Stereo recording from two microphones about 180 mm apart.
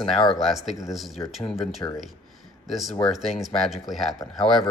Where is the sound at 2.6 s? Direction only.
Centre (ahead or behind).